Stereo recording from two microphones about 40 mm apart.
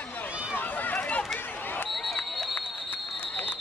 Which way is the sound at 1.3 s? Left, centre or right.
Left.